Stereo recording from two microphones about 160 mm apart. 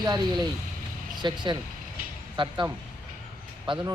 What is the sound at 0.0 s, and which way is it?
Speech, 25° right (ahead or behind).